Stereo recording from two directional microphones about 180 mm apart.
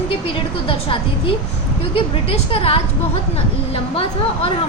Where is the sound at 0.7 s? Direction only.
30° left (ahead or behind).